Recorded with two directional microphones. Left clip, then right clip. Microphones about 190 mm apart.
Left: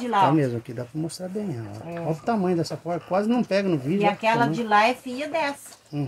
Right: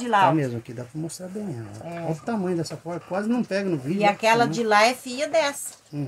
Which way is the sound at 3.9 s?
50° right (ahead or behind).